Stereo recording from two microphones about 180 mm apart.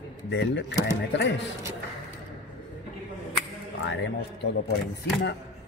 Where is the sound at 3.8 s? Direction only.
90° left.